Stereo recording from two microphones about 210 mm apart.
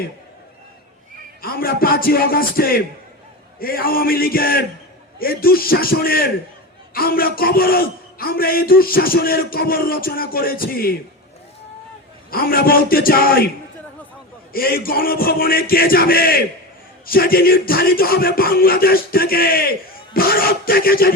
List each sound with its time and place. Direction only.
1.4 s a man's voice: 45° left (ahead or behind)
12.3 s a man's voice: 45° left (ahead or behind)
14.5 s a man's voice: 45° left (ahead or behind)